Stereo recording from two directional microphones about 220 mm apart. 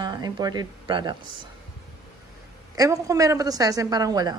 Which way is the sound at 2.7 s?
15° right (ahead or behind).